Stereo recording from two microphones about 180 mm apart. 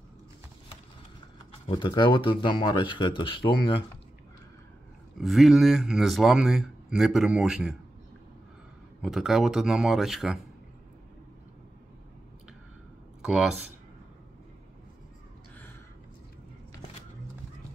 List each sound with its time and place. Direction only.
1.7 s speech: 25° left (ahead or behind)
5.2 s speech: centre (ahead or behind)
9.0 s speech: centre (ahead or behind)
13.2 s speech: 5° right (ahead or behind)